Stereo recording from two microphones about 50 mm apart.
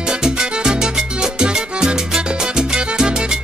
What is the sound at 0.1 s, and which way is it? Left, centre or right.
Music, centre.